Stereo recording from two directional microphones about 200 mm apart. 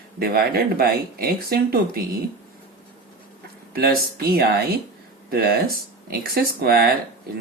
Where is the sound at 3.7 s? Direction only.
50° right (ahead or behind).